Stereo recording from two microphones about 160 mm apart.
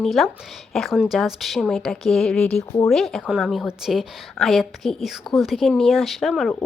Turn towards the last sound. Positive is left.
turn(degrees=0)  # may be behind; listen again after turning